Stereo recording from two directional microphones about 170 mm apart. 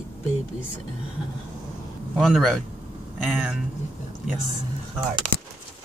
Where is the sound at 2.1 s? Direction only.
Centre (ahead or behind).